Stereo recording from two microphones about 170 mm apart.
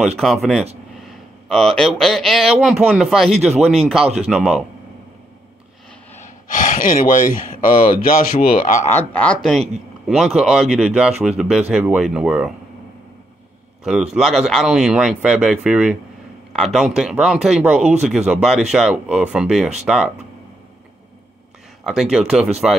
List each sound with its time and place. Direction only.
0.2 s speech: centre (ahead or behind)
6.1 s speech: 50° left (ahead or behind)
8.8 s speech: 10° left (ahead or behind)
13.8 s speech: 5° right (ahead or behind)
21.8 s speech: centre (ahead or behind)